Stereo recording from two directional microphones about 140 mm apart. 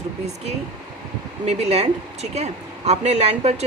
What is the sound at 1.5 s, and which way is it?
A woman's voice, 50° right (ahead or behind).